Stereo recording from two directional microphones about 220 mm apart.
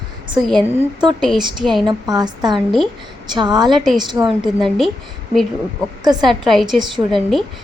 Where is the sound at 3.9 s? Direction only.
20° right (ahead or behind).